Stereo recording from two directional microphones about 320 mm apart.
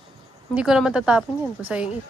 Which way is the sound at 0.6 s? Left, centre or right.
Centre.